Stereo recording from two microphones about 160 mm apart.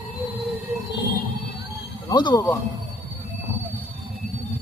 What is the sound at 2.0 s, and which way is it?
Speech, 25° left (ahead or behind).